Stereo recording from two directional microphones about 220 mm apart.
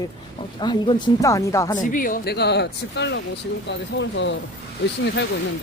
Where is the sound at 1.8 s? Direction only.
40° left (ahead or behind); by 4.4 s 55° left (ahead or behind).